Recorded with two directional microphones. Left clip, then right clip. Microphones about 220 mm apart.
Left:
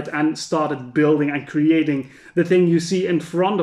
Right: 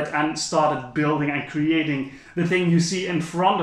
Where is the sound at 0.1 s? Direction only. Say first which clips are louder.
Left 5 dB; 50° left (ahead or behind).